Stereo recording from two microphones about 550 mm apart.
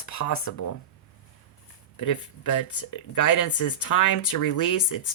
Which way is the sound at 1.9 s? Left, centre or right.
Left.